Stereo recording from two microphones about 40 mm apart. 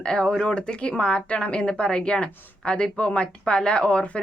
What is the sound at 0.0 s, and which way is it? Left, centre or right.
Speech, left.